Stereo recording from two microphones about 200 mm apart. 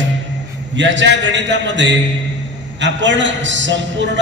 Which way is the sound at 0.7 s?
65° right (ahead or behind).